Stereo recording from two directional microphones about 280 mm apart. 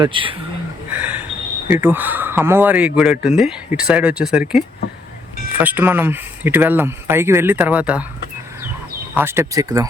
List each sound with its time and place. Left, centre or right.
0.0 s speech: centre
0.9 s a sound: centre
1.7 s speech: centre
9.1 s speech: centre